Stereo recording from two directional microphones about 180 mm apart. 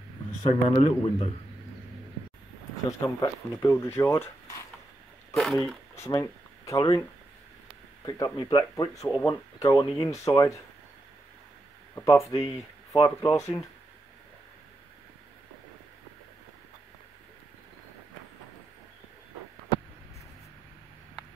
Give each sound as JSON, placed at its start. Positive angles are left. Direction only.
{"t": 0.7, "sound": "a man's voice", "side_deg": 30}
{"t": 2.9, "sound": "speech", "side_deg": 15}
{"t": 5.3, "sound": "speech", "side_deg": 0}
{"t": 5.9, "sound": "speech", "side_deg": 15}
{"t": 11.9, "sound": "speech", "side_deg": 15}